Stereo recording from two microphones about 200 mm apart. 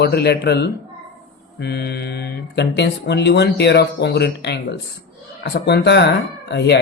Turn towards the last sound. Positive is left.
turn(degrees=60)  # may be behind; listen again after turning